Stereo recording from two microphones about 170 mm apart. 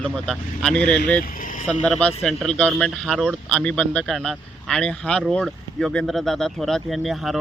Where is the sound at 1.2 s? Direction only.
55° left (ahead or behind).